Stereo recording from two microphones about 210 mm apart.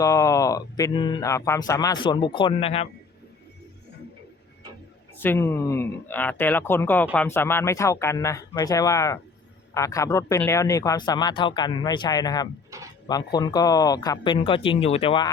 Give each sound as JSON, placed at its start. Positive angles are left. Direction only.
{"t": 0.0, "sound": "speech", "side_deg": 15}
{"t": 5.2, "sound": "speech", "side_deg": 10}